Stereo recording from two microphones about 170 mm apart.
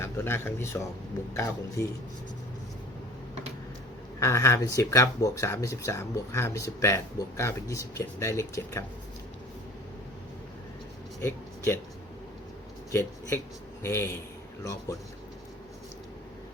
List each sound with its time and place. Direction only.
0.0 s a man's voice: 15° left (ahead or behind)
4.2 s speech: 15° left (ahead or behind)
11.2 s a sound: 15° left (ahead or behind)
12.9 s a man's voice: 15° left (ahead or behind)